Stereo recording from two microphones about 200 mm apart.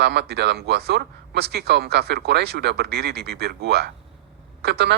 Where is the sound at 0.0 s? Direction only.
55° right (ahead or behind).